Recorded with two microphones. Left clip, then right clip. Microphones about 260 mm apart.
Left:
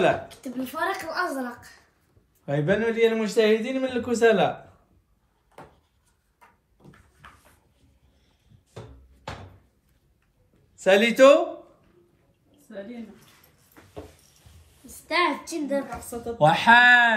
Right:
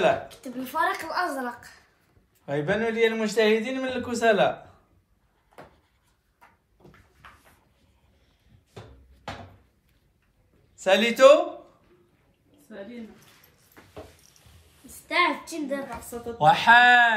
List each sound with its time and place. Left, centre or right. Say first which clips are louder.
0.0 s a child's voice: even; centre
10.8 s a child's voice: left 1 dB; centre
14.9 s a woman's voice: even; centre
16.3 s a child's voice: even; centre